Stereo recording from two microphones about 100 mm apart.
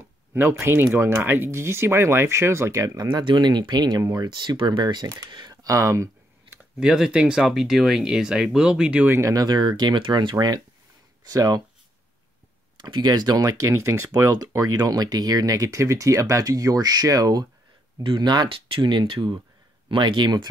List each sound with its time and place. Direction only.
0.3 s speech: 25° right (ahead or behind)
6.8 s speech: 10° right (ahead or behind)
9.1 s speech: 35° right (ahead or behind); by 10.3 s 55° right (ahead or behind)
10.3 s speech: 45° right (ahead or behind)
12.7 s speech: 45° right (ahead or behind)
18.0 s speech: 50° right (ahead or behind)